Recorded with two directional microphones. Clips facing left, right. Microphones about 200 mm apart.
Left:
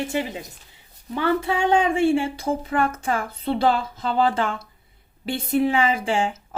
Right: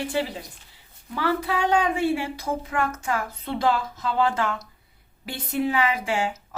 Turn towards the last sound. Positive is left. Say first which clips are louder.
# left 3 dB
turn(degrees=30)  # may be behind; listen again after turning